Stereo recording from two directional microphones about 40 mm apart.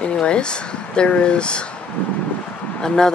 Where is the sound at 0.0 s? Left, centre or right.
Left.